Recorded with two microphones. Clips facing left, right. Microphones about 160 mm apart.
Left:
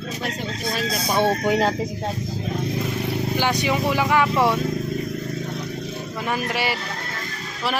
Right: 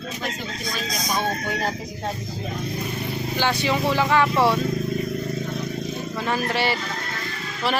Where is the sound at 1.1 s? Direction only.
90° left.